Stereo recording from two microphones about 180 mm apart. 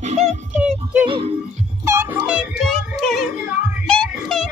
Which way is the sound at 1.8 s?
15° right (ahead or behind).